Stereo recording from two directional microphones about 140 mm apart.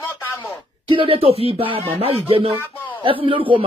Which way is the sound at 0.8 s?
40° right (ahead or behind).